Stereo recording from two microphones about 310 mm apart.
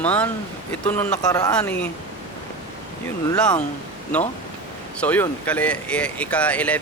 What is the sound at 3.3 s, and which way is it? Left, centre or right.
Speech, centre.